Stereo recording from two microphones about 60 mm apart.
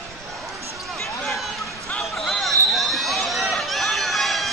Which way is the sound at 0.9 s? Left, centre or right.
Centre.